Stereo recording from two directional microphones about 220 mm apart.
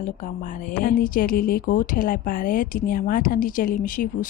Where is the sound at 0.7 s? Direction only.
40° left (ahead or behind).